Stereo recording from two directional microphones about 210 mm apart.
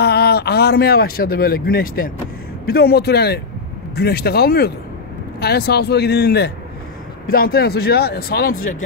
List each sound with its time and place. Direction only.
0.0 s speech: 50° left (ahead or behind)